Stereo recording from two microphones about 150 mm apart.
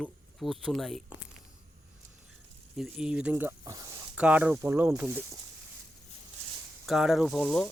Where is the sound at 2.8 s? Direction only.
5° right (ahead or behind); by 4.0 s 20° right (ahead or behind).